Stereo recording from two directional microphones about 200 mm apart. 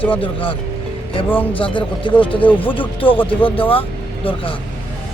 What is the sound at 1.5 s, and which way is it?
Speech, 25° left (ahead or behind).